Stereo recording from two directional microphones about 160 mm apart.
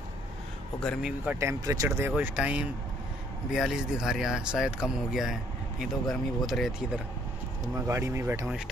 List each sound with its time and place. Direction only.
0.7 s speech: 5° left (ahead or behind)
1.2 s speech: 15° right (ahead or behind)
7.7 s speech: 15° right (ahead or behind)